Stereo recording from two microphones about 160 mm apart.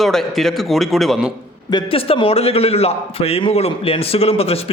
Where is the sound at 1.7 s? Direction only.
30° left (ahead or behind).